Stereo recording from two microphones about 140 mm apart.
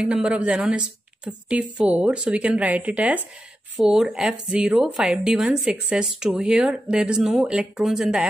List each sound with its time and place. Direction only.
0.0 s a woman's voice: 10° right (ahead or behind)